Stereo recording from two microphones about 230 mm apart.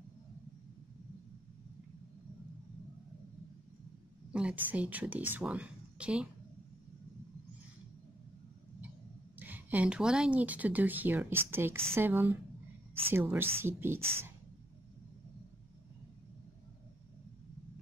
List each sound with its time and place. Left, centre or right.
4.3 s speech: centre
9.4 s speech: centre